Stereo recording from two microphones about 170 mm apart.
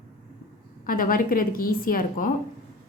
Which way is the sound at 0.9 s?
55° left (ahead or behind).